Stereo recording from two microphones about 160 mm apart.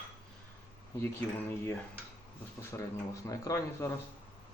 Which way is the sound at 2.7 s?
20° left (ahead or behind).